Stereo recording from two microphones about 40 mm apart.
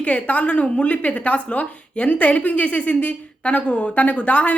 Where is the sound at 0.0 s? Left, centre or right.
Left.